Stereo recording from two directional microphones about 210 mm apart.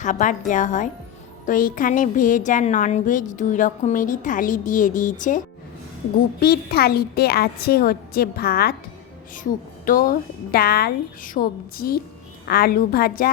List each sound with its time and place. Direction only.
0.0 s a woman's voice: 35° left (ahead or behind)
6.4 s a woman's voice: 45° left (ahead or behind)